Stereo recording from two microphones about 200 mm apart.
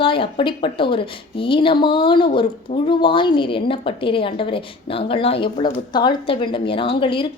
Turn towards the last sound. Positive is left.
turn(degrees=25)  # may be behind; listen again after turning